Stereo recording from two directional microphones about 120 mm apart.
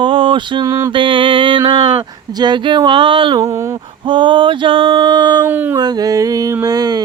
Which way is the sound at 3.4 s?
25° right (ahead or behind).